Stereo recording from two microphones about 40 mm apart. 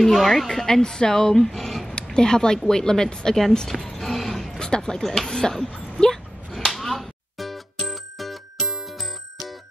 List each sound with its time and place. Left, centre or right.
0.0 s speech: centre
2.1 s speech: centre
3.5 s a sound: centre
4.6 s speech: centre
5.0 s speech: centre
5.3 s speech: centre
6.5 s music: centre